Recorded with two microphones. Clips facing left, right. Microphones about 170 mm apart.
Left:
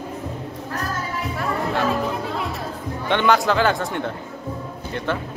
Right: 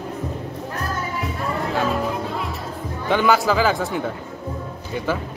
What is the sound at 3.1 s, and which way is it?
Mantra, 5° right (ahead or behind).